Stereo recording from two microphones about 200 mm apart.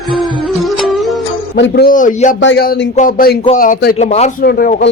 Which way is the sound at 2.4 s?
50° left (ahead or behind).